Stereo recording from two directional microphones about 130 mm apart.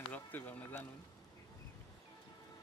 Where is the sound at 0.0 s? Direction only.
10° left (ahead or behind).